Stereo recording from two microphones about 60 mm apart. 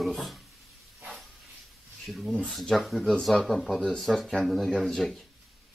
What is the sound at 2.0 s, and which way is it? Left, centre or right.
Speech, centre.